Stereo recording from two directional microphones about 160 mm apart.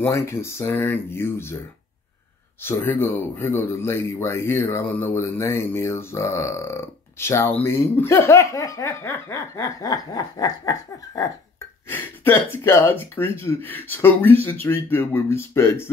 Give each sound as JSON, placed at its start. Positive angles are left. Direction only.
{"t": 0.0, "sound": "speech", "side_deg": 15}
{"t": 2.6, "sound": "speech", "side_deg": 15}
{"t": 12.6, "sound": "speech", "side_deg": 15}